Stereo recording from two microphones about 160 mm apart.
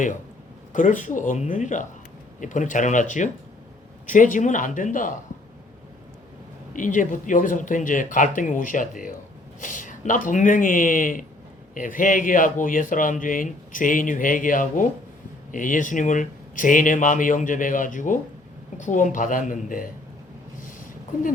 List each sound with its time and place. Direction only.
0.7 s speech: 55° left (ahead or behind)
6.7 s speech: 55° left (ahead or behind)
20.6 s a sound: 55° left (ahead or behind)